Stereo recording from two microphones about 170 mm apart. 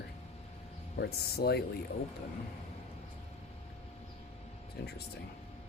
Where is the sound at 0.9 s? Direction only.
70° left (ahead or behind).